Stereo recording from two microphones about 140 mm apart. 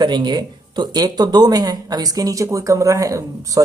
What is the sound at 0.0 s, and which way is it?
Speech, 35° right (ahead or behind).